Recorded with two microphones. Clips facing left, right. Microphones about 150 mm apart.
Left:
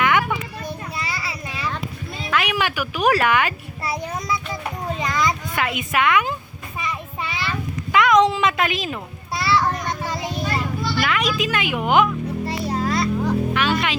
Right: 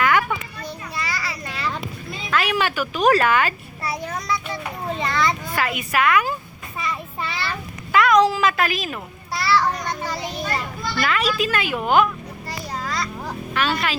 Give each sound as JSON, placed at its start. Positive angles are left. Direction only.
{"t": 0.0, "sound": "a sound", "side_deg": 20}
{"t": 2.3, "sound": "speech", "side_deg": 15}
{"t": 3.8, "sound": "child singing", "side_deg": 20}
{"t": 4.9, "sound": "children playing", "side_deg": 0}
{"t": 5.1, "sound": "a child's voice", "side_deg": 20}
{"t": 7.9, "sound": "a sound", "side_deg": 20}
{"t": 10.4, "sound": "a child's voice", "side_deg": 5}
{"t": 12.5, "sound": "a sound", "side_deg": 25}
{"t": 13.5, "sound": "speech", "side_deg": 15}